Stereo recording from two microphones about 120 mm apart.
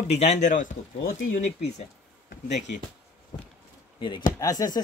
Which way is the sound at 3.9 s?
40° left (ahead or behind).